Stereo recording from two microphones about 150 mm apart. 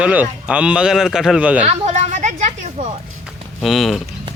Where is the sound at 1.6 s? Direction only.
45° right (ahead or behind).